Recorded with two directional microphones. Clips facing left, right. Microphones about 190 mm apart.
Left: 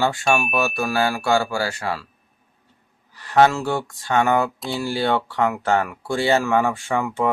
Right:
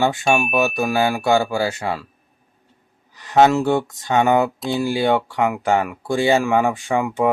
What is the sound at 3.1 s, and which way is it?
Speech, 20° right (ahead or behind).